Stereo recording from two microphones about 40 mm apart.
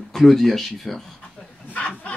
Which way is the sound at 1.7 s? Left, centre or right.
Left.